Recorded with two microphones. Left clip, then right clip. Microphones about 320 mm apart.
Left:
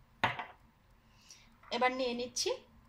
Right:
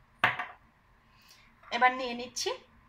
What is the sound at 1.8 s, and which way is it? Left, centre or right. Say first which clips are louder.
Speech: right 6 dB; centre.